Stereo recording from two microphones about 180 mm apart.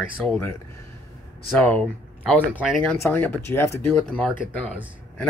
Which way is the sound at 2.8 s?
10° left (ahead or behind).